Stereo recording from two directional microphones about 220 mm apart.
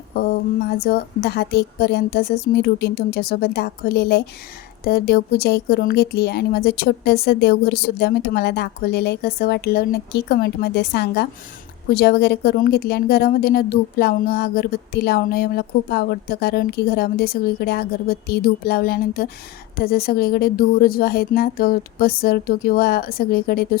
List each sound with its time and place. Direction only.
0.8 s speech: 45° left (ahead or behind)